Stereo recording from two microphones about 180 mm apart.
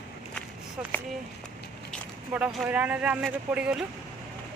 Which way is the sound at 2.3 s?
5° right (ahead or behind).